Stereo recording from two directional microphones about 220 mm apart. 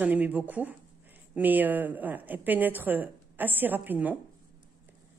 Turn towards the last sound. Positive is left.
turn(degrees=-5)  # may be behind; listen again after turning